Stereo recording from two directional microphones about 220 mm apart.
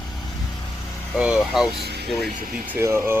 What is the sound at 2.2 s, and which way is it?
Speech, 40° right (ahead or behind).